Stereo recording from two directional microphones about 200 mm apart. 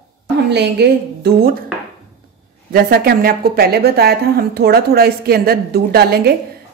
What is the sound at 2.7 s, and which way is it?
Speech, 50° right (ahead or behind).